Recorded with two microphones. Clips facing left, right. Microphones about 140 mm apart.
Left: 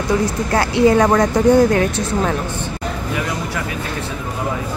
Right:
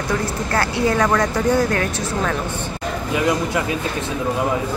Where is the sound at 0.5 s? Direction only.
20° left (ahead or behind).